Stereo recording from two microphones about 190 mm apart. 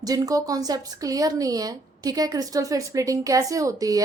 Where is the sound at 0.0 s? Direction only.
20° right (ahead or behind).